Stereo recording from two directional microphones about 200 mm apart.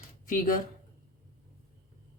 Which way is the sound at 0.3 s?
40° left (ahead or behind).